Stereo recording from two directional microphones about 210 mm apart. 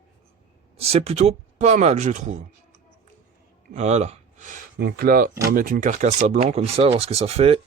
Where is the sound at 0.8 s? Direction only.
30° right (ahead or behind).